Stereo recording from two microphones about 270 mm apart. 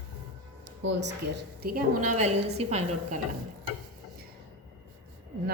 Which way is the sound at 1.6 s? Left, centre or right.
Right.